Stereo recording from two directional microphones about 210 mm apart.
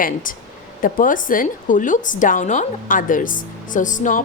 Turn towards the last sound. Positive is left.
turn(degrees=35)  # may be behind; listen again after turning